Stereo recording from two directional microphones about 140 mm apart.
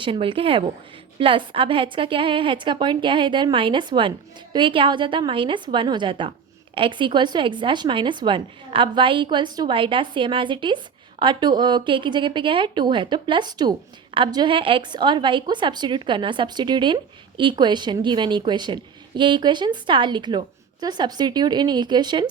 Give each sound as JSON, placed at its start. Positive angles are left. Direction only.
{"t": 0.0, "sound": "a woman's voice", "side_deg": -35}